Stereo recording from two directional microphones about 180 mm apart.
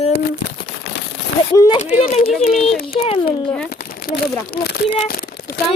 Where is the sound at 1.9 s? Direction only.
35° left (ahead or behind).